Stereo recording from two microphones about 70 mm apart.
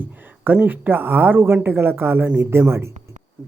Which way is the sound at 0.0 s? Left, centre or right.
Right.